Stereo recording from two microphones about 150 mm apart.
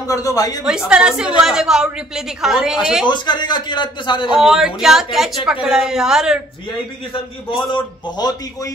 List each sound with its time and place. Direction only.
0.1 s a man's voice: 20° left (ahead or behind)
0.7 s a woman's voice: 5° right (ahead or behind)
3.1 s speech: 30° left (ahead or behind)
4.3 s a woman's voice: centre (ahead or behind)
7.7 s a man's voice: 30° left (ahead or behind)